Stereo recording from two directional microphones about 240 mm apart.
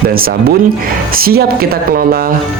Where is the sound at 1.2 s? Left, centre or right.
Right.